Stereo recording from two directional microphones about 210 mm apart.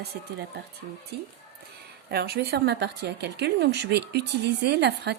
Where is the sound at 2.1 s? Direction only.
50° right (ahead or behind).